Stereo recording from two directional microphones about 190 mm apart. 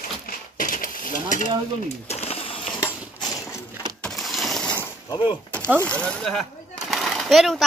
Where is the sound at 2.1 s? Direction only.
30° left (ahead or behind).